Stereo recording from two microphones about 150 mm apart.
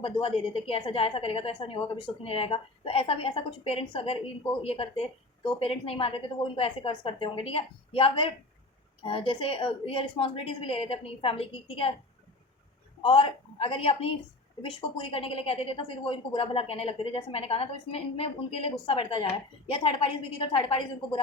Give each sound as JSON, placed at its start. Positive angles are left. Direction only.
{"t": 0.0, "sound": "a woman's voice", "side_deg": 35}
{"t": 13.0, "sound": "a woman's voice", "side_deg": 35}